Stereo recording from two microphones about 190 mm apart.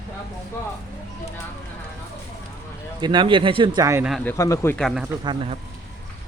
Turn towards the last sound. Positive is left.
turn(degrees=-25)  # may be behind; listen again after turning